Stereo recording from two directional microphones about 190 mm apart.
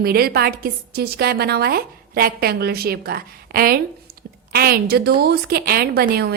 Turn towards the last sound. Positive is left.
turn(degrees=-55)  # may be behind; listen again after turning